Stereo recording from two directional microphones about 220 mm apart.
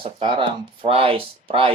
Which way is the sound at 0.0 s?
25° right (ahead or behind).